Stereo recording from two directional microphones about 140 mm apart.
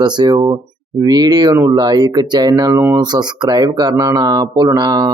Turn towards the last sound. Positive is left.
turn(degrees=-30)  # may be behind; listen again after turning